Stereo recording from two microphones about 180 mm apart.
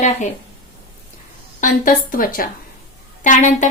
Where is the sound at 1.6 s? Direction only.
50° left (ahead or behind).